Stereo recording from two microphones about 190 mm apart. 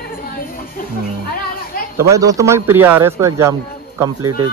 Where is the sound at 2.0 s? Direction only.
15° right (ahead or behind).